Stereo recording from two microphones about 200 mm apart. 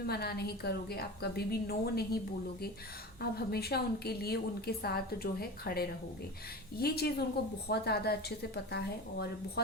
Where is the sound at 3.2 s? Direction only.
50° left (ahead or behind).